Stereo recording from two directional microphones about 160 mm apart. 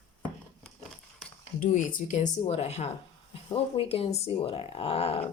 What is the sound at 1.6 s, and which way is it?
Speech, 55° left (ahead or behind).